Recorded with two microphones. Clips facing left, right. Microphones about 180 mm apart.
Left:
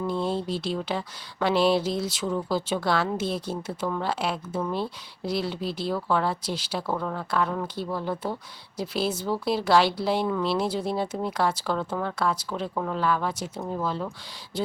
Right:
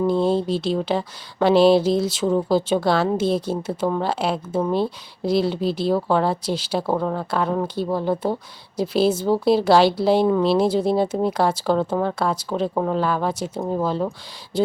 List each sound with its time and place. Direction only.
0.0 s speech: 30° right (ahead or behind)